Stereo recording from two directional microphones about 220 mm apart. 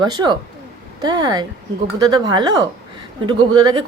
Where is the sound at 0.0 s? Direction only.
20° right (ahead or behind).